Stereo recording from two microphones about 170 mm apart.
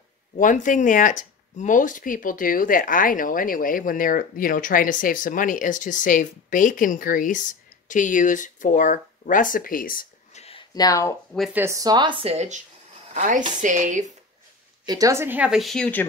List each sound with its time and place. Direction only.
0.4 s speech: 50° left (ahead or behind)
10.4 s a sound: 30° left (ahead or behind)
11.5 s a woman's voice: 15° right (ahead or behind); by 14.1 s 45° right (ahead or behind)
14.9 s speech: 20° right (ahead or behind); by 16.1 s 10° left (ahead or behind)